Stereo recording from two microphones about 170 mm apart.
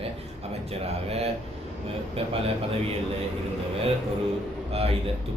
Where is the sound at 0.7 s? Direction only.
35° right (ahead or behind).